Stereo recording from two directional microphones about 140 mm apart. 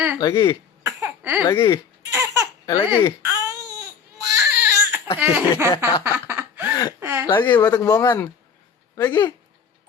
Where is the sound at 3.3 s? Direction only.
20° right (ahead or behind).